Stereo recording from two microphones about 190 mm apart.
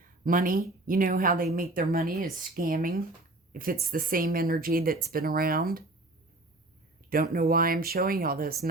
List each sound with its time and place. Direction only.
0.3 s speech: 45° right (ahead or behind)
7.1 s speech: 50° right (ahead or behind)